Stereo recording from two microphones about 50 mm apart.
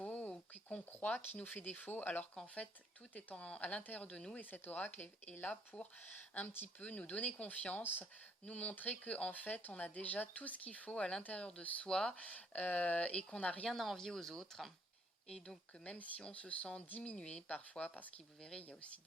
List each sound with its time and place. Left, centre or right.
0.0 s a sound: left
0.9 s speech: left
6.8 s speech: left
8.4 s speech: left
11.6 s speech: left
11.9 s speech: centre
12.2 s speech: left
13.7 s speech: centre
15.8 s speech: left
18.3 s speech: centre